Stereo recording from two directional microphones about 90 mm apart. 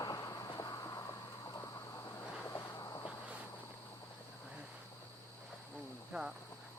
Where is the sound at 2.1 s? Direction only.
30° left (ahead or behind).